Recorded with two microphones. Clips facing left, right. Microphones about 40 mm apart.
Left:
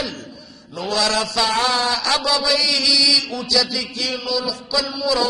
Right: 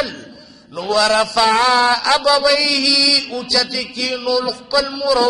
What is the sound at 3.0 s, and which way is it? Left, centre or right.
A man's voice, centre.